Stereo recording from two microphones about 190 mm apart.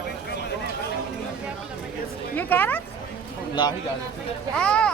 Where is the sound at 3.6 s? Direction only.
25° left (ahead or behind).